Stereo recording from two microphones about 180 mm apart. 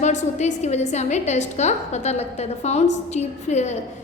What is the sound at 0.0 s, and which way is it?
A woman's voice, 40° left (ahead or behind).